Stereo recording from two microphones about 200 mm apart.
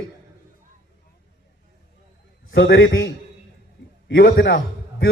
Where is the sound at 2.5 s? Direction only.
70° left (ahead or behind).